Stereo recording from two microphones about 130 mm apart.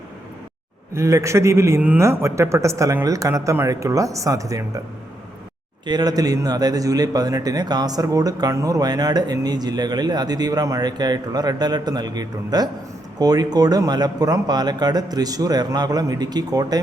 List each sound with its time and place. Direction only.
0.9 s speech: 25° right (ahead or behind)
5.8 s a man's voice: 35° right (ahead or behind)